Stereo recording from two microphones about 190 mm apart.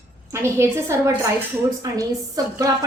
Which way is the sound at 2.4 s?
20° right (ahead or behind).